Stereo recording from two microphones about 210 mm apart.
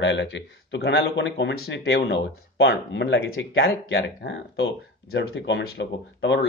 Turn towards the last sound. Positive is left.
turn(degrees=55)  # may be behind; listen again after turning